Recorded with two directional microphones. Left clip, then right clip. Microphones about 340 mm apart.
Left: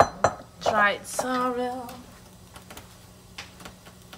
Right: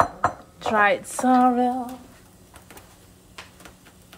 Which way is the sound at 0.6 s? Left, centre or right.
Centre.